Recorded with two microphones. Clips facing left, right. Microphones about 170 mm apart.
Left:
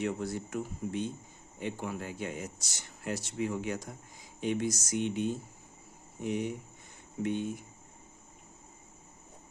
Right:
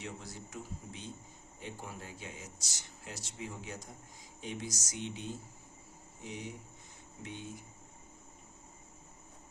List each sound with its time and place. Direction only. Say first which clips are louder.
0.0 s speech: left 12 dB; 60° left (ahead or behind)
1.5 s speech: left 9 dB; 70° left (ahead or behind)